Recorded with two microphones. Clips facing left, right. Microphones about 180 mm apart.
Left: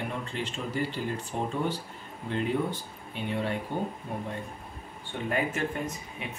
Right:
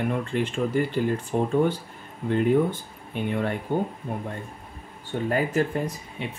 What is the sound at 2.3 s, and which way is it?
Speech, 50° right (ahead or behind).